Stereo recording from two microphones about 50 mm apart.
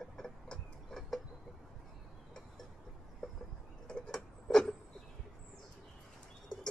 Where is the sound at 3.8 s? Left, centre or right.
Centre.